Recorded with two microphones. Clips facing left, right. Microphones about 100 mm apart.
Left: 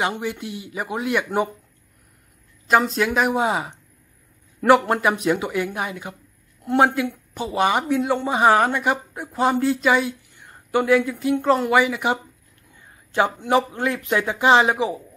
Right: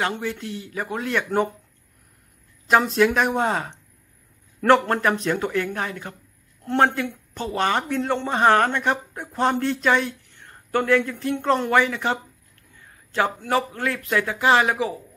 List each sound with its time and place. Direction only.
0.0 s a man's voice: 15° left (ahead or behind)
2.7 s a man's voice: centre (ahead or behind); by 15.0 s 20° left (ahead or behind)